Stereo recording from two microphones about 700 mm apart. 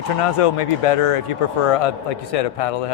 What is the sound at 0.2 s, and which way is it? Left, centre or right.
Speech, left.